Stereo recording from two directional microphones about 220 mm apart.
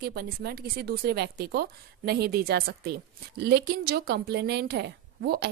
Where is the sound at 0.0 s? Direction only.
45° right (ahead or behind).